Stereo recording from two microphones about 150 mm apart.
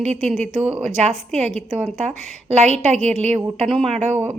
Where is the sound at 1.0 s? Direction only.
45° right (ahead or behind).